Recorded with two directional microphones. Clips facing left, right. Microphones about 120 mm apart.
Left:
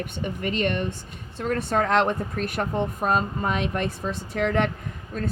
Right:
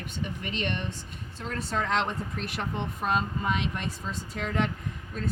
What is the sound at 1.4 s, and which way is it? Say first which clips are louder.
Speech: left 8 dB; 60° left (ahead or behind).